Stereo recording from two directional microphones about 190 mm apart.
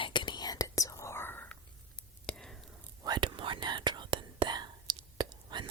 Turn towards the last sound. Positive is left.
turn(degrees=-25)  # may be behind; listen again after turning